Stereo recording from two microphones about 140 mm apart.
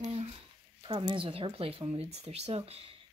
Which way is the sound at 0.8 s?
35° right (ahead or behind).